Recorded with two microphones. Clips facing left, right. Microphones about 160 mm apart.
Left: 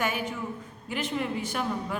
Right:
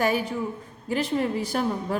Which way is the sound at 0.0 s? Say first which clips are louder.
Right 6 dB; 35° right (ahead or behind).